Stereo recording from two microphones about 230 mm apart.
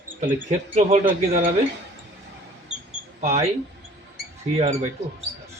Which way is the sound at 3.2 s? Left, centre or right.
Right.